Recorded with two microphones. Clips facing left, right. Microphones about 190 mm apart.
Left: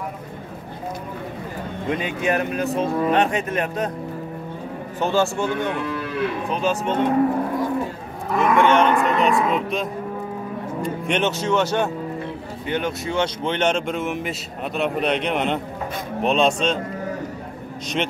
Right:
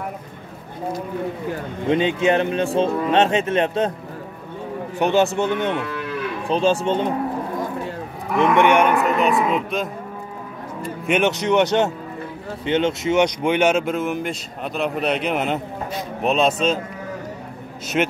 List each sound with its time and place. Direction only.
1.9 s speech: 25° right (ahead or behind)
4.9 s speech: 20° right (ahead or behind)
8.5 s speech: 15° right (ahead or behind)
17.9 s speech: 5° right (ahead or behind)